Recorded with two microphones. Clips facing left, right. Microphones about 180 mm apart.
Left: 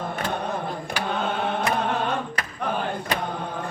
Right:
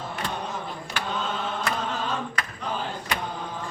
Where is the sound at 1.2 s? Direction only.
60° left (ahead or behind).